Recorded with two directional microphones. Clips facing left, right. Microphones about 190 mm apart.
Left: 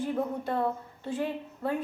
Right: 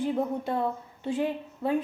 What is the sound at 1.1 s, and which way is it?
Speech, 15° right (ahead or behind).